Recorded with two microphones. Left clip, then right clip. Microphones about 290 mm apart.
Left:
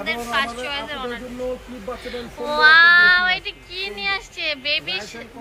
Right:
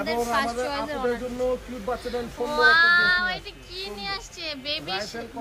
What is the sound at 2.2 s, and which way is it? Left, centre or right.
Speech, centre.